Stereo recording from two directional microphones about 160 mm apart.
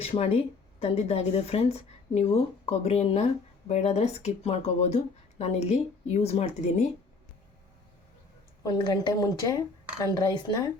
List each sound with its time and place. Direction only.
0.0 s speech: 35° left (ahead or behind)
8.6 s a woman's voice: 30° left (ahead or behind)